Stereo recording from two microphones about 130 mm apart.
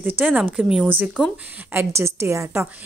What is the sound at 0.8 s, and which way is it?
A woman's voice, 15° right (ahead or behind).